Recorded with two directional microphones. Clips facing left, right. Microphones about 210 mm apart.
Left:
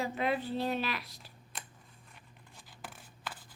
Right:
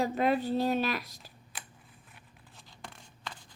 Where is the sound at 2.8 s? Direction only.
5° left (ahead or behind).